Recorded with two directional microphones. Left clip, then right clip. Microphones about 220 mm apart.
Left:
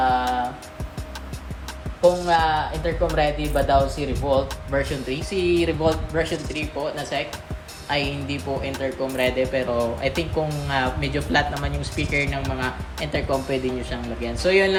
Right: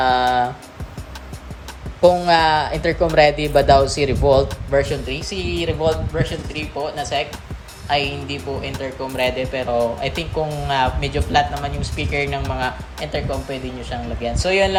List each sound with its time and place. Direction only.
0.0 s music: 30° right (ahead or behind)
2.2 s speech: 30° right (ahead or behind)
4.7 s speech: 10° right (ahead or behind)